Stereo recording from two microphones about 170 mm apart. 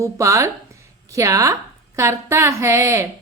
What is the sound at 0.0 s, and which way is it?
A woman's voice, 20° right (ahead or behind).